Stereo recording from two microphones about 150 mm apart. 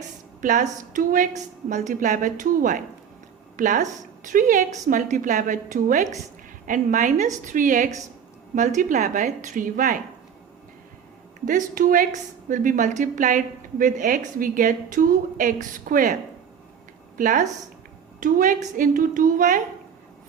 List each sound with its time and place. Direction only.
0.4 s a woman's voice: 60° right (ahead or behind)
11.4 s a woman's voice: 60° right (ahead or behind)
17.2 s a woman's voice: 60° right (ahead or behind)